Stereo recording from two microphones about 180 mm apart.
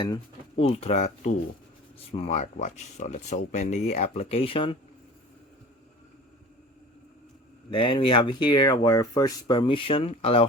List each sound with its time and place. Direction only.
0.0 s speech: 30° left (ahead or behind)
7.7 s speech: 30° left (ahead or behind)